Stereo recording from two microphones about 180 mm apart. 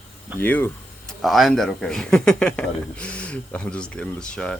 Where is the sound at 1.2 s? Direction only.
Centre (ahead or behind).